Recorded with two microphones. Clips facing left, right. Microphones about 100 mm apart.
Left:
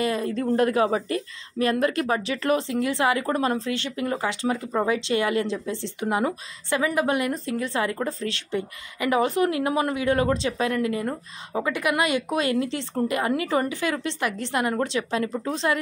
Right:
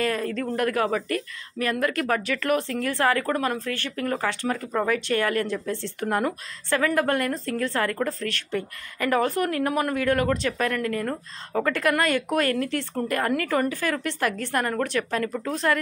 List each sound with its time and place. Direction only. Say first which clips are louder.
0.0 s a woman's voice: left 1 dB; 20° left (ahead or behind)